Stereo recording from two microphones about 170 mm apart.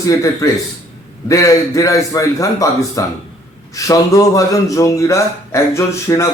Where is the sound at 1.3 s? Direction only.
20° left (ahead or behind).